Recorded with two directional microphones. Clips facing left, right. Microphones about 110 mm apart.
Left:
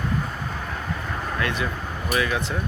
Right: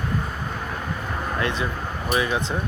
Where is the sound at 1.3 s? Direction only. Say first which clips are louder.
Right 1 dB; 25° right (ahead or behind).